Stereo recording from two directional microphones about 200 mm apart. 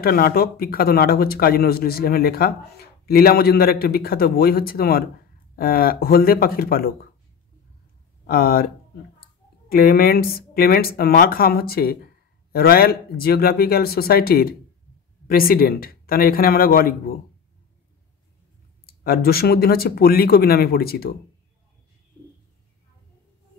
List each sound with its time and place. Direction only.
0.0 s speech: 50° left (ahead or behind)
8.3 s speech: 50° left (ahead or behind)
9.7 s speech: 50° left (ahead or behind)
18.9 s speech: 50° left (ahead or behind)